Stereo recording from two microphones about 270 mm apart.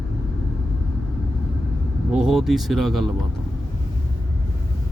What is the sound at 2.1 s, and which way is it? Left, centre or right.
Speech, centre.